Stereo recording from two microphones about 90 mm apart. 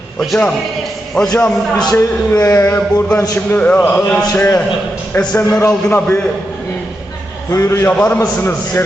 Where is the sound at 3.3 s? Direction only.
20° left (ahead or behind).